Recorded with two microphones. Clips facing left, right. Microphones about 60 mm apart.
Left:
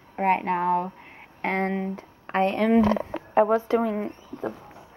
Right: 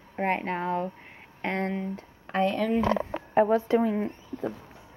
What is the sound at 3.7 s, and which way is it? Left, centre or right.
Speech, left.